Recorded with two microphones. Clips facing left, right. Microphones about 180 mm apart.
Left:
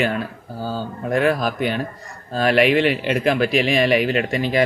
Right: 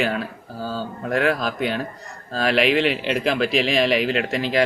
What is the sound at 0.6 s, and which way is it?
Speech, 25° left (ahead or behind).